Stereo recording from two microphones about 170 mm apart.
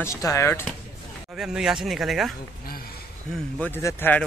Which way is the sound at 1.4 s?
5° right (ahead or behind).